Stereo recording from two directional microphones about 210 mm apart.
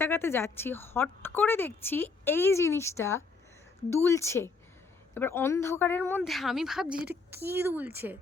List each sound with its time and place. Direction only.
0.0 s a woman's voice: 10° left (ahead or behind); by 8.2 s 10° right (ahead or behind)